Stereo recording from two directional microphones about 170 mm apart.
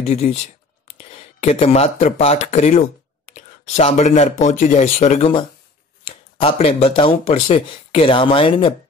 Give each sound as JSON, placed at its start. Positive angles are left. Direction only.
{"t": 0.0, "sound": "speech", "side_deg": 40}